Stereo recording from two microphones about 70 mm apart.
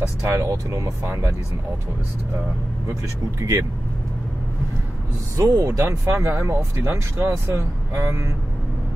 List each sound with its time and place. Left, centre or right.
0.2 s speech: right
3.3 s speech: right
5.4 s speech: right
5.9 s speech: right